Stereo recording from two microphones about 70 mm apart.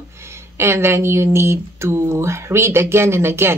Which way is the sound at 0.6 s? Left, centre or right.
Right.